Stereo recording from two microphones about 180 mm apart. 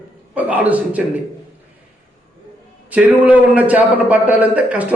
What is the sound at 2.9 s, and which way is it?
A man's voice, 10° right (ahead or behind).